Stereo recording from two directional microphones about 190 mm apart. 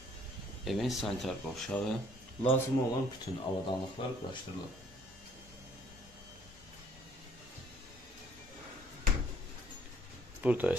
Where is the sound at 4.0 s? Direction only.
25° left (ahead or behind).